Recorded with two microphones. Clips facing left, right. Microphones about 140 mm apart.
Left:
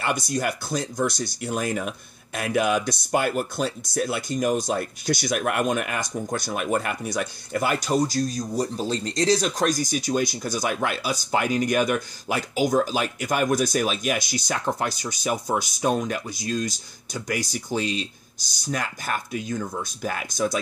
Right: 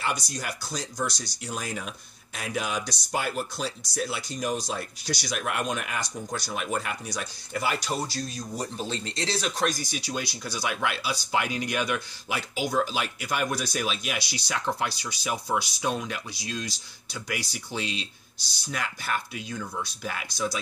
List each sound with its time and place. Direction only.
0.0 s speech: 55° left (ahead or behind)